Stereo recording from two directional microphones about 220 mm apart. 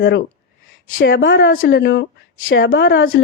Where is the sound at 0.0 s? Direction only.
50° left (ahead or behind).